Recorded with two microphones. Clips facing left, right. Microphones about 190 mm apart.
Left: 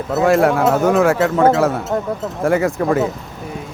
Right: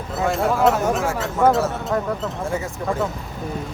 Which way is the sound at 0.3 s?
75° left (ahead or behind).